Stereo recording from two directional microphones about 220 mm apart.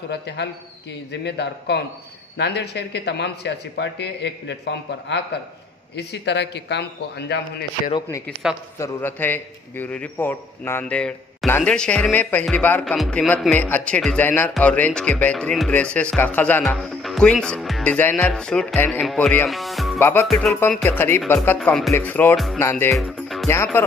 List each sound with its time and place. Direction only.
1.2 s speech: 50° left (ahead or behind)
8.7 s a man's voice: 10° left (ahead or behind)
22.9 s music: centre (ahead or behind)
23.5 s speech: 10° left (ahead or behind)